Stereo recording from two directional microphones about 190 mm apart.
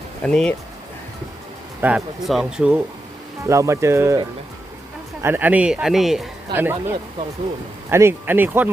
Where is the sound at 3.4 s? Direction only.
15° right (ahead or behind).